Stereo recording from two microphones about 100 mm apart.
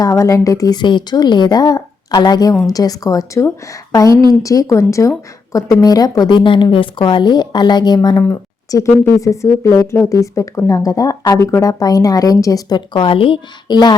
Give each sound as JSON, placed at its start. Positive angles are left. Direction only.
{"t": 0.0, "sound": "a woman's voice", "side_deg": 35}
{"t": 4.1, "sound": "speech", "side_deg": -50}
{"t": 4.4, "sound": "a woman's voice", "side_deg": 35}
{"t": 13.7, "sound": "speech", "side_deg": 45}